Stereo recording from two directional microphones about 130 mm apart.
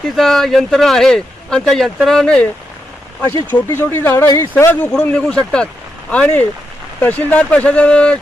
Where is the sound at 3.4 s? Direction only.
15° left (ahead or behind).